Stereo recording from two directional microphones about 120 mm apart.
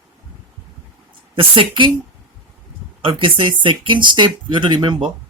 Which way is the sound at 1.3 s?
45° right (ahead or behind).